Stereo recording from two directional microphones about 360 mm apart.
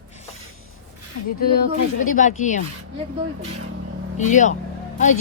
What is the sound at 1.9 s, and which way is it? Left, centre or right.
Speech, left.